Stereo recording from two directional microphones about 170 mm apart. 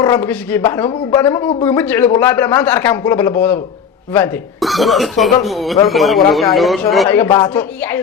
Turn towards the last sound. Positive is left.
turn(degrees=10)  # may be behind; listen again after turning